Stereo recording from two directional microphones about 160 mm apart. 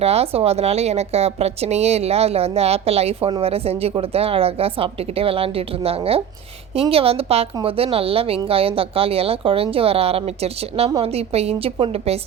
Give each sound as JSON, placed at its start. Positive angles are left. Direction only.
{"t": 0.0, "sound": "speech", "side_deg": -40}